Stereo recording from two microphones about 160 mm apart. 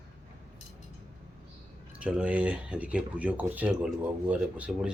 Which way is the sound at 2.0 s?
5° right (ahead or behind).